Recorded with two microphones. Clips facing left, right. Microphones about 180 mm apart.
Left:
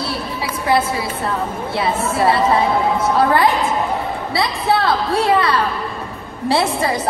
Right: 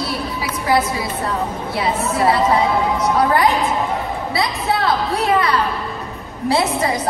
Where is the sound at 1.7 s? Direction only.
25° left (ahead or behind).